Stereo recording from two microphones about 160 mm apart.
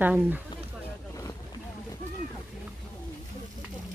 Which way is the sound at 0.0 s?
10° right (ahead or behind).